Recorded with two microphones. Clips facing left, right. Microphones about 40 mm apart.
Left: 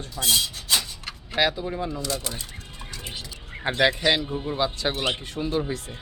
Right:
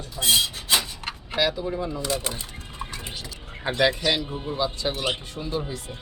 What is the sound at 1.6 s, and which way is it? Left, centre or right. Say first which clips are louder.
Speech: right 1 dB; centre.